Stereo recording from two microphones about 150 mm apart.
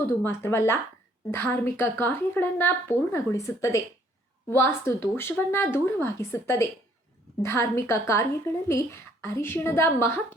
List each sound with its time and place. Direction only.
0.0 s a woman's voice: 15° left (ahead or behind)